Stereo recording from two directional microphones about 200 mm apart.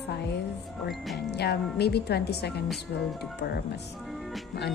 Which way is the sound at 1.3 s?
55° left (ahead or behind).